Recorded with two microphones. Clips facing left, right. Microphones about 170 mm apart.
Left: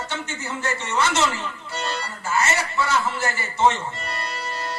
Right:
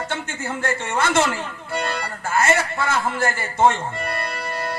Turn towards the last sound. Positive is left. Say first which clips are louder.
# right 3 dB
turn(degrees=-55)  # may be behind; listen again after turning